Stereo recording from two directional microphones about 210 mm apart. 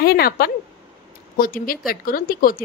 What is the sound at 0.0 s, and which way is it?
Speech, 50° left (ahead or behind).